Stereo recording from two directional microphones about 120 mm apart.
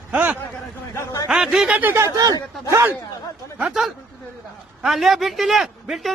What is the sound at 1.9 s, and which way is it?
Speech, 25° right (ahead or behind).